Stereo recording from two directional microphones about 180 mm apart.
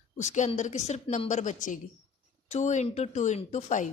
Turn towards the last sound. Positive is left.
turn(degrees=40)  # may be behind; listen again after turning